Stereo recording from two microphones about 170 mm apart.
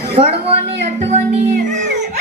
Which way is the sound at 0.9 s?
40° right (ahead or behind).